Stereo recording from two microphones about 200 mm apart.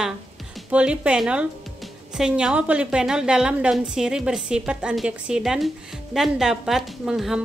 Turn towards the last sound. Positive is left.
turn(degrees=0)  # may be behind; listen again after turning